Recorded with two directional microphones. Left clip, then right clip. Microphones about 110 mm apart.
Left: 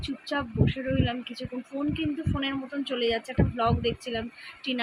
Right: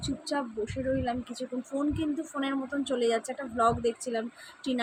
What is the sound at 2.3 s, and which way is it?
Speech, 20° right (ahead or behind).